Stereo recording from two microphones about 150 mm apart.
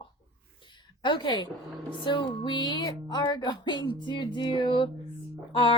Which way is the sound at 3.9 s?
30° left (ahead or behind).